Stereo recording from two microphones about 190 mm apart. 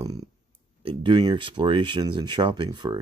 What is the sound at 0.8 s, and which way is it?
Speech, 25° right (ahead or behind).